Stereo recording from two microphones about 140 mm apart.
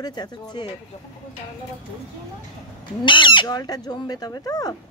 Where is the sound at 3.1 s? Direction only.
35° left (ahead or behind).